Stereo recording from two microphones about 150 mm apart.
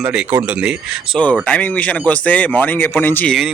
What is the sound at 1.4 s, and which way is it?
Speech, 10° left (ahead or behind).